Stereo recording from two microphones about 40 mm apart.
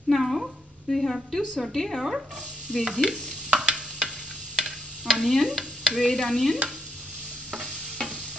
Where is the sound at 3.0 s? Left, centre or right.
Centre.